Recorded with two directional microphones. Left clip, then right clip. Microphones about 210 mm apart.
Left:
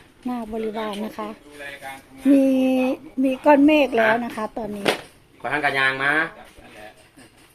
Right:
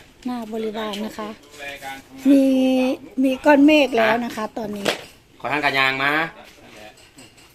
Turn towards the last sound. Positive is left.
turn(degrees=-55)  # may be behind; listen again after turning